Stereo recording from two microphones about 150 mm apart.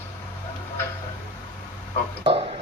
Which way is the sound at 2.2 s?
45° right (ahead or behind).